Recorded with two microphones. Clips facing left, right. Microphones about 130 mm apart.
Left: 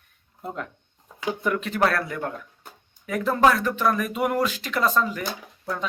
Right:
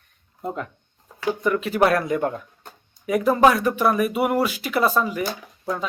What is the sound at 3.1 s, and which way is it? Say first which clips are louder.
Speech: right 3 dB; 10° right (ahead or behind).